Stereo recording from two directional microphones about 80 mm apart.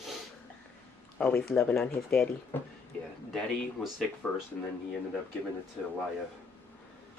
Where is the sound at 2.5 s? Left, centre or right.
Left.